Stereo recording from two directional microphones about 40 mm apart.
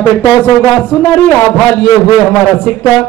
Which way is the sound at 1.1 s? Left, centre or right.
Left.